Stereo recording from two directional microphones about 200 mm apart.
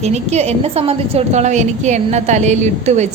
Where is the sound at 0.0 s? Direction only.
35° right (ahead or behind).